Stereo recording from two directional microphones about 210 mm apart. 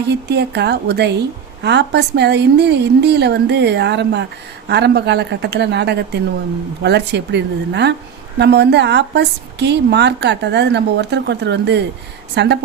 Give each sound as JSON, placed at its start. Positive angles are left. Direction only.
{"t": 0.1, "sound": "a woman's voice", "side_deg": -50}